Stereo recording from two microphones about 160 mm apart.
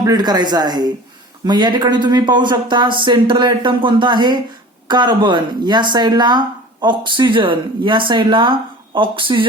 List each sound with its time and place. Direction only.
0.0 s speech: 25° right (ahead or behind)